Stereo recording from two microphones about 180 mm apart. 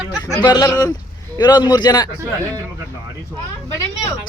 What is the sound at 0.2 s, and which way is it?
Speech, 25° left (ahead or behind).